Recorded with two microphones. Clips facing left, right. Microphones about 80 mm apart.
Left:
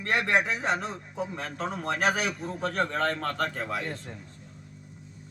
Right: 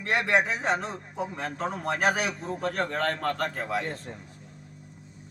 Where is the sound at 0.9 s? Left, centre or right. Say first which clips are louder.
Right 1 dB; right.